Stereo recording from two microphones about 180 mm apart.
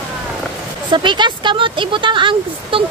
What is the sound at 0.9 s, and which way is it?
Speech, 25° right (ahead or behind).